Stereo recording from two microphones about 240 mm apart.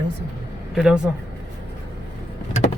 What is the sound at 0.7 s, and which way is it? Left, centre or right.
Speech, centre.